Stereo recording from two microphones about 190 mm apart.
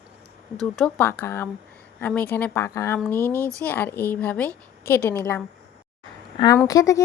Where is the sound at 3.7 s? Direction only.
10° left (ahead or behind).